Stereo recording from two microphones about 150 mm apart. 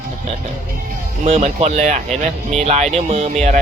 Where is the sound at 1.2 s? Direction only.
45° right (ahead or behind).